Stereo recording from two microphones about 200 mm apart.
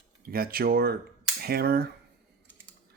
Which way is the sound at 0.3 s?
50° right (ahead or behind).